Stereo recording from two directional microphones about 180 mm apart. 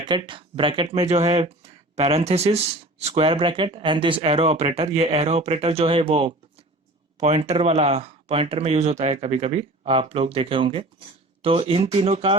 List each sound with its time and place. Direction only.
0.0 s speech: 25° right (ahead or behind)